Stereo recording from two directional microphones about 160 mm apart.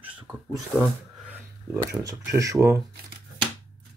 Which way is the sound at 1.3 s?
15° right (ahead or behind).